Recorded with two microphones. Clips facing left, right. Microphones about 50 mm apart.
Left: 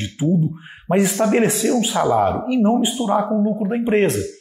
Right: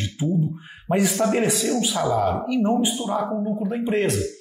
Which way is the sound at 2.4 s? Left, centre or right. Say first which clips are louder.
Left 4 dB; left.